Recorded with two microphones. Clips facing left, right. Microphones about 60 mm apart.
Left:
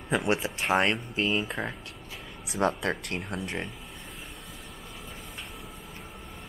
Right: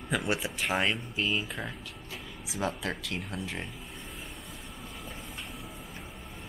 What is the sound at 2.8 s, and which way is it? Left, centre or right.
Speech, left.